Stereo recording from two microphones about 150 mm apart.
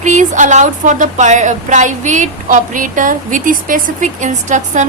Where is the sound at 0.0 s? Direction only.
55° right (ahead or behind).